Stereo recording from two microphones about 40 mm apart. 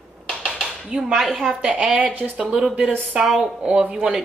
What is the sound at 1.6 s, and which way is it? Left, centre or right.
A woman's voice, right.